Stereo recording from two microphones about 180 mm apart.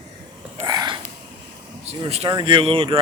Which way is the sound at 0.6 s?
20° right (ahead or behind).